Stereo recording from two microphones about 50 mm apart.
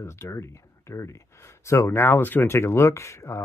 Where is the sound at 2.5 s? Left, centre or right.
Left.